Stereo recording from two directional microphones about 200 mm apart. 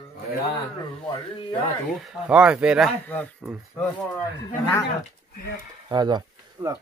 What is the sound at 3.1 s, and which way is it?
Speech, 5° left (ahead or behind).